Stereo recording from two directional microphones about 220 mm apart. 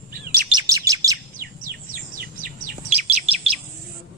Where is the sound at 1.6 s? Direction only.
40° right (ahead or behind).